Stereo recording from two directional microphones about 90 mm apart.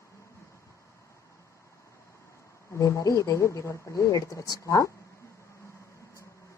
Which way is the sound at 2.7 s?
35° left (ahead or behind).